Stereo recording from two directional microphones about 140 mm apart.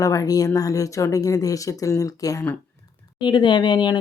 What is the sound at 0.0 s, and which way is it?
Speech, 25° left (ahead or behind).